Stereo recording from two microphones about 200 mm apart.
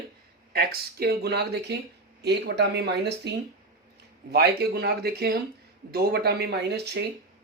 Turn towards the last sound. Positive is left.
turn(degrees=-55)  # may be behind; listen again after turning